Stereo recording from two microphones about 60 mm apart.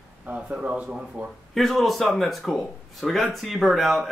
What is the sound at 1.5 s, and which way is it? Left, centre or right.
Speech, centre.